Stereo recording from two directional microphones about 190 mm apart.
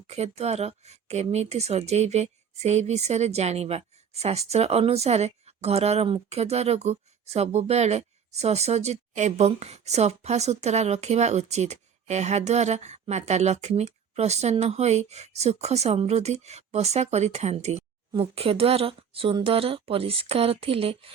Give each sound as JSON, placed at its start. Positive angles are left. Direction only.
{"t": 0.1, "sound": "speech", "side_deg": -35}